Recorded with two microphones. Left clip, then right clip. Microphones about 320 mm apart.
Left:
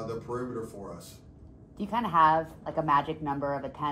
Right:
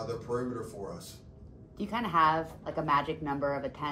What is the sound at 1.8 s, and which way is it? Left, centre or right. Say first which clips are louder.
Speech: left 3 dB; left.